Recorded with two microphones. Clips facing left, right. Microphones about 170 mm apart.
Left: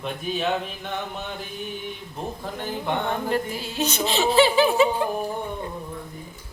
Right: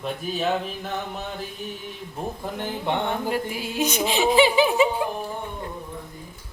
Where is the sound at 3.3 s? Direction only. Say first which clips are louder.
Left 1 dB; 10° right (ahead or behind).